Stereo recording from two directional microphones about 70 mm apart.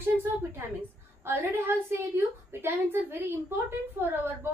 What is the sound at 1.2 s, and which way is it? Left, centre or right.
A woman's voice, right.